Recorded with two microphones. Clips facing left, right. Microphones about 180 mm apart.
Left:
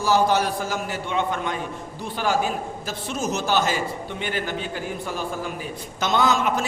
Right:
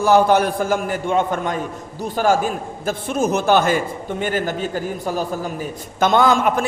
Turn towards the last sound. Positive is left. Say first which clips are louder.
# right 5 dB
turn(degrees=-50)  # may be behind; listen again after turning